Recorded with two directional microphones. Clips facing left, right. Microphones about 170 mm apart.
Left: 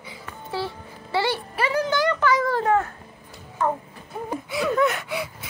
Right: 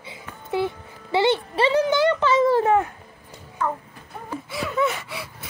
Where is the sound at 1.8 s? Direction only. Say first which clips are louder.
Right 2 dB; 20° right (ahead or behind).